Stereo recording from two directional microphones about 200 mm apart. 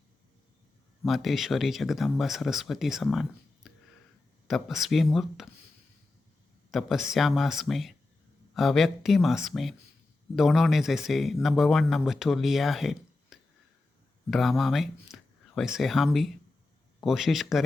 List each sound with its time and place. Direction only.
1.0 s speech: centre (ahead or behind)
6.7 s speech: centre (ahead or behind)